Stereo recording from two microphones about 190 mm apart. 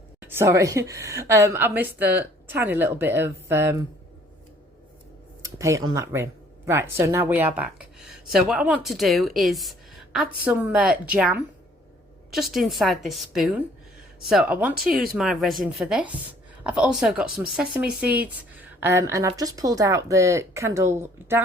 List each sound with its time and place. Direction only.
0.2 s a woman's voice: 10° right (ahead or behind)
5.5 s a woman's voice: 15° right (ahead or behind)